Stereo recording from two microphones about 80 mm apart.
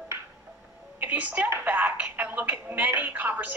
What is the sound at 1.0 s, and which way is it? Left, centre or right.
A woman's voice, centre.